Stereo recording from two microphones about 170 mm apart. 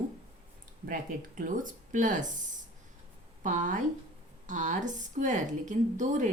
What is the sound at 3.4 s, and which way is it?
A woman's voice, 45° right (ahead or behind).